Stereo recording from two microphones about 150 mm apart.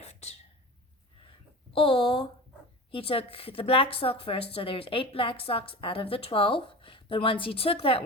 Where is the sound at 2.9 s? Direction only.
40° left (ahead or behind).